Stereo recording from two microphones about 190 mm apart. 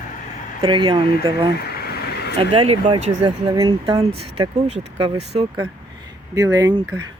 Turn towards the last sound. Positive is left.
turn(degrees=-20)  # may be behind; listen again after turning